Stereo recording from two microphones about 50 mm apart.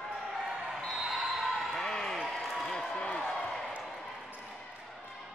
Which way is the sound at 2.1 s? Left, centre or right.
Centre.